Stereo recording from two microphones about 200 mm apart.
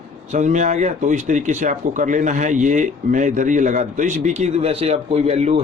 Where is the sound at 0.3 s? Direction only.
35° right (ahead or behind).